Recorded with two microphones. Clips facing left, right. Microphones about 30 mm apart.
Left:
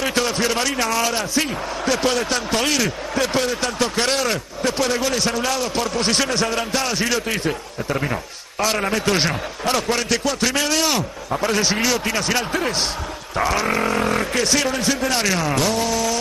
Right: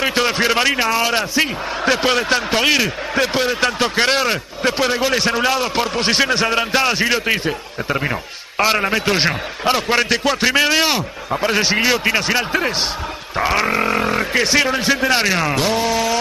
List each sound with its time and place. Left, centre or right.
0.0 s speech: right